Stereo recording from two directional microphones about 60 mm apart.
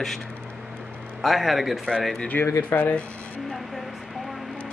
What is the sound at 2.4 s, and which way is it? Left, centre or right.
Speech, left.